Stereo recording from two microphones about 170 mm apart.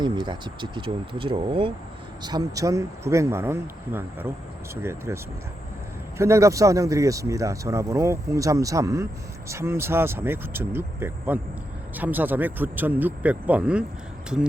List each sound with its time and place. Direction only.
0.0 s speech: 25° right (ahead or behind); by 13.8 s 5° right (ahead or behind)